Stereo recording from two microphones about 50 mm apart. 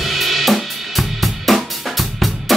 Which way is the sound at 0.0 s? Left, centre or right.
Centre.